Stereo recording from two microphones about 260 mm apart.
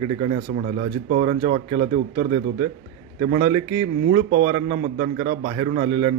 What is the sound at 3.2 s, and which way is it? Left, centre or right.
A man's voice, right.